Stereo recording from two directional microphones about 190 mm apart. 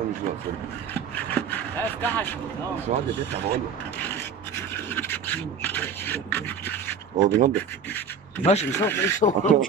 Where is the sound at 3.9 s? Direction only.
10° left (ahead or behind).